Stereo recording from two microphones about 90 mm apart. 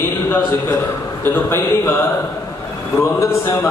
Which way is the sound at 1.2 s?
25° left (ahead or behind).